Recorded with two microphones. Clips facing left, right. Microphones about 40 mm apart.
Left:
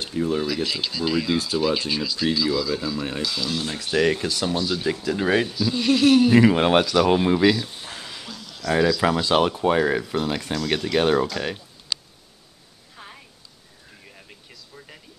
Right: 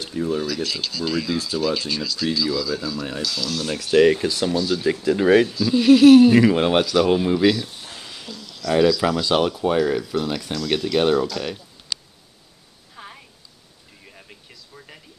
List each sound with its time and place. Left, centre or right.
0.0 s speech: centre
3.6 s speech: left
4.0 s speech: centre
6.4 s speech: centre
7.2 s speech: left
7.4 s a sound: centre
8.4 s speech: left
10.7 s speech: left
12.9 s a sound: centre